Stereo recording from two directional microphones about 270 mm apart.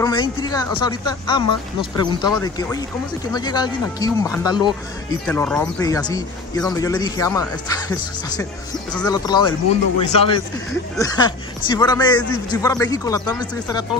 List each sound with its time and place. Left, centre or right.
0.0 s a man's voice: centre
8.9 s a man's voice: centre